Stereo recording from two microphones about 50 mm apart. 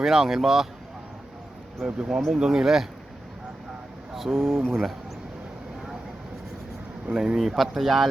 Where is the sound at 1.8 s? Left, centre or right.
Centre.